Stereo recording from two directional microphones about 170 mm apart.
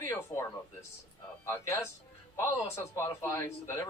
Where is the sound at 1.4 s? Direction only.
15° left (ahead or behind).